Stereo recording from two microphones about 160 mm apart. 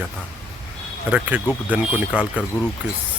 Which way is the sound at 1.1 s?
10° right (ahead or behind).